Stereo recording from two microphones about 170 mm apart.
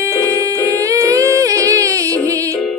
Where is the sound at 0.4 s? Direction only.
20° right (ahead or behind).